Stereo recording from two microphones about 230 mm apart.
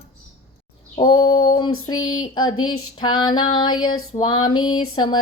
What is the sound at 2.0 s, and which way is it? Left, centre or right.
Speech, left.